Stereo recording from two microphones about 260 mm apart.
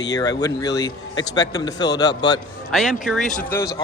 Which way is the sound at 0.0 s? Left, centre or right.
Centre.